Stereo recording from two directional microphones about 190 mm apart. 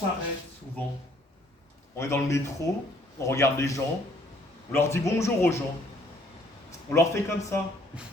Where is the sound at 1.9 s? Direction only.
15° left (ahead or behind).